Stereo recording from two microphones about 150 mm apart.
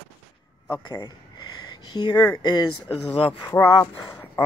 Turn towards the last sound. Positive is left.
turn(degrees=20)  # may be behind; listen again after turning